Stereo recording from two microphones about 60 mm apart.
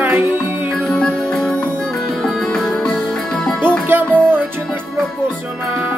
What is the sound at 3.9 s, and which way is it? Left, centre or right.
Music, right.